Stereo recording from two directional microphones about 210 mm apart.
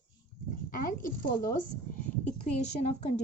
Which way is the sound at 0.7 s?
40° left (ahead or behind).